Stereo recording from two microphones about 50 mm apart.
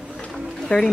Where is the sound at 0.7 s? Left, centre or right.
Left.